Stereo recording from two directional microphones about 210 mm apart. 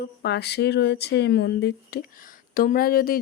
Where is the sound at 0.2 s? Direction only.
50° left (ahead or behind).